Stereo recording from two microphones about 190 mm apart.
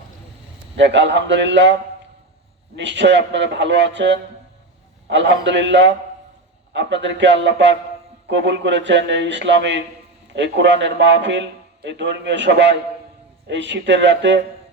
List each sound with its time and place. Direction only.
0.8 s a man's voice: 70° right (ahead or behind)